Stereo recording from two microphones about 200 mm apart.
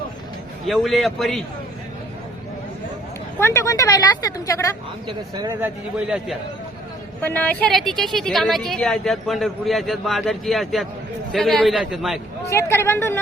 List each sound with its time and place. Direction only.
0.7 s a woman's voice: centre (ahead or behind)
3.4 s a woman's voice: 15° left (ahead or behind)
5.0 s a man's voice: 20° right (ahead or behind); by 6.3 s 5° right (ahead or behind)
7.2 s a woman's voice: 10° left (ahead or behind)
12.5 s a woman's voice: 15° left (ahead or behind)